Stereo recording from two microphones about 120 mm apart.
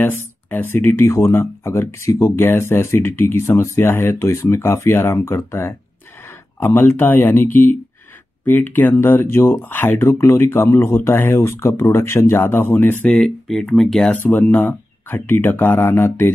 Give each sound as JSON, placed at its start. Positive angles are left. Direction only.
{"t": 0.0, "sound": "speech", "side_deg": 15}